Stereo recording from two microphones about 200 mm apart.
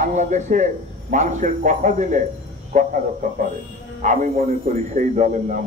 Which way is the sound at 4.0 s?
35° right (ahead or behind).